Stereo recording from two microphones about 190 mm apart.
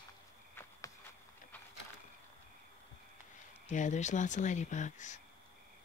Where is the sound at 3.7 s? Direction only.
40° left (ahead or behind).